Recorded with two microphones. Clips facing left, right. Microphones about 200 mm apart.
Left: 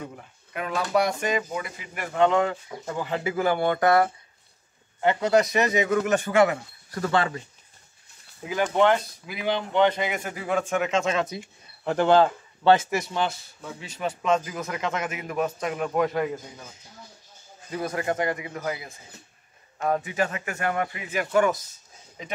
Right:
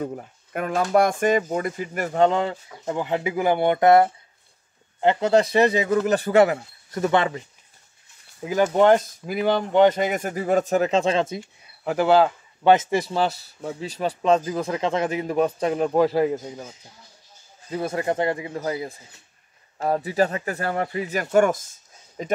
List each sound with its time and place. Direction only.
0.0 s speech: 40° right (ahead or behind)
2.9 s a man's voice: 20° right (ahead or behind); by 6.6 s 35° right (ahead or behind)
6.9 s a man's voice: 20° right (ahead or behind)
8.7 s speech: 45° right (ahead or behind); by 11.4 s 25° right (ahead or behind)
11.8 s speech: 5° right (ahead or behind)
12.7 s a man's voice: 25° right (ahead or behind)
17.6 s a man's voice: 25° right (ahead or behind); by 22.3 s 45° right (ahead or behind)